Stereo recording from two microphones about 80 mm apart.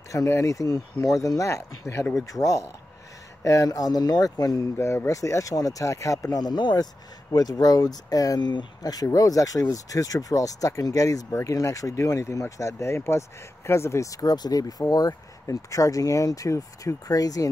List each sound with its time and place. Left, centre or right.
0.3 s speech: left
4.7 s speech: left
6.3 s speech: left